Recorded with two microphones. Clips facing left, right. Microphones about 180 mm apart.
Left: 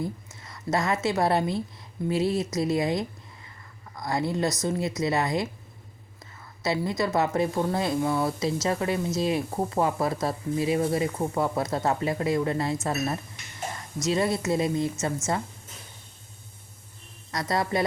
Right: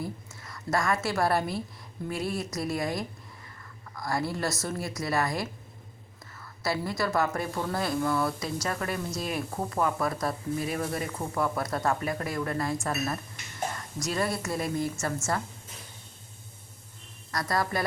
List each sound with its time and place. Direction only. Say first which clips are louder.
0.0 s a woman's voice: left 4 dB; 20° left (ahead or behind)
14.0 s speech: left 5 dB; 25° left (ahead or behind)
17.3 s speech: left 3 dB; 20° left (ahead or behind)